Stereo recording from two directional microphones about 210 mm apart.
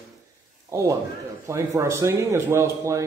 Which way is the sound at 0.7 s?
15° right (ahead or behind).